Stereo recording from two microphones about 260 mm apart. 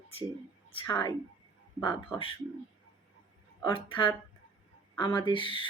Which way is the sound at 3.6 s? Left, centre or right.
Centre.